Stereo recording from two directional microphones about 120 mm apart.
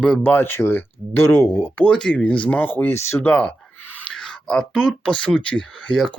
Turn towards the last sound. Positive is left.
turn(degrees=5)  # may be behind; listen again after turning